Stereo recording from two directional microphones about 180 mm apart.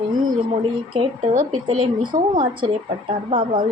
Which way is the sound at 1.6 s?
25° right (ahead or behind).